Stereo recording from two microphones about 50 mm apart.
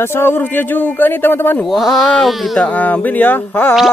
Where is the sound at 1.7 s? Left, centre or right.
Centre.